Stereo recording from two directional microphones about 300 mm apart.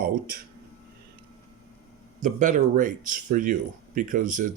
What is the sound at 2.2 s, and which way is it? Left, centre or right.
Speech, right.